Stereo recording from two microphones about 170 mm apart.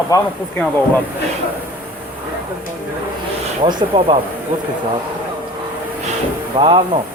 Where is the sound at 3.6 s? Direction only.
30° right (ahead or behind).